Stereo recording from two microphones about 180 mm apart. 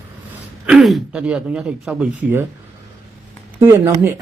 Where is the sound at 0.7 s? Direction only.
Centre (ahead or behind).